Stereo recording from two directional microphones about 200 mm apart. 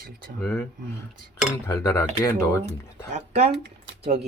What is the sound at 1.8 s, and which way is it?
Speech, 15° left (ahead or behind).